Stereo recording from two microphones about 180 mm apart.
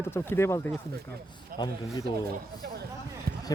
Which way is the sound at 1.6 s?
25° left (ahead or behind).